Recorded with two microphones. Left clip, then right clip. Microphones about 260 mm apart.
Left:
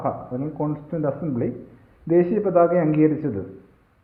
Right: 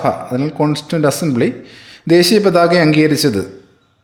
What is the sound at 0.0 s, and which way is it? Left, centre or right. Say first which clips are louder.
A man's voice: right 10 dB; right.